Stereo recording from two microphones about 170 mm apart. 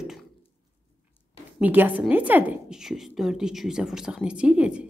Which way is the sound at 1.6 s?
10° right (ahead or behind).